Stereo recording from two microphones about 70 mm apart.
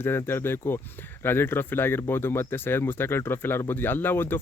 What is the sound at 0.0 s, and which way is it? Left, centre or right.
Speech, left.